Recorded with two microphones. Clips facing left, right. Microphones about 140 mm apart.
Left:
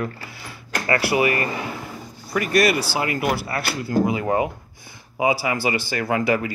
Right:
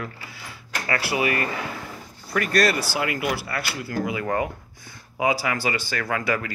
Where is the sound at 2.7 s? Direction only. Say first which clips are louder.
Left 2 dB; 30° left (ahead or behind).